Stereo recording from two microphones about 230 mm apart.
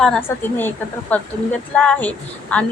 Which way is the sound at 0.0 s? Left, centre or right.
Centre.